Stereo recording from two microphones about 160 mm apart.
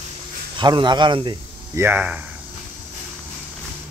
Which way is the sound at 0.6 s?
30° right (ahead or behind).